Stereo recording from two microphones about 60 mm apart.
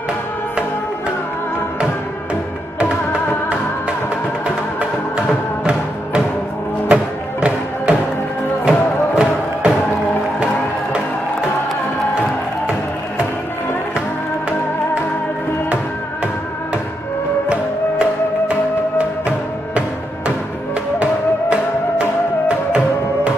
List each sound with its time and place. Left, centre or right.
4.7 s music: centre
18.5 s music: right
21.0 s music: centre